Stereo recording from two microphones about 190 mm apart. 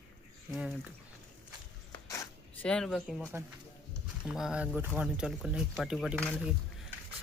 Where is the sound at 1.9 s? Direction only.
15° left (ahead or behind).